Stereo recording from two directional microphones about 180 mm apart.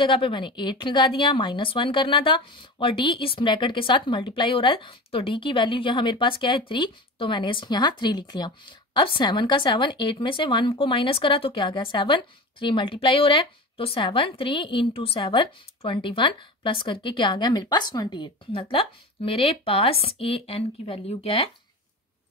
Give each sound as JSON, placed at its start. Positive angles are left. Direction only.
{"t": 0.0, "sound": "speech", "side_deg": 25}